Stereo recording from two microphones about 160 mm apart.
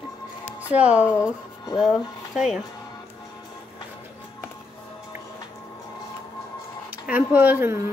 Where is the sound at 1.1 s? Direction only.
20° left (ahead or behind).